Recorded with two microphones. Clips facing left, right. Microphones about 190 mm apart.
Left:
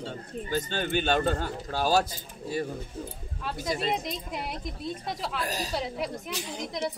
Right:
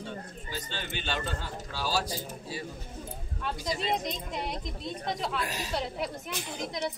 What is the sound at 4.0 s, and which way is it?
A woman's voice, 5° left (ahead or behind).